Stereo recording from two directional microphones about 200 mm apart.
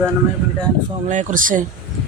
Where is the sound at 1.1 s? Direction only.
40° right (ahead or behind).